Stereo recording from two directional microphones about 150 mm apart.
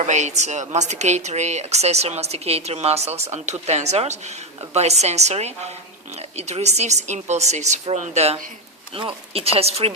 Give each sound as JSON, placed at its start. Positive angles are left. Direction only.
{"t": 0.0, "sound": "a woman's voice", "side_deg": -50}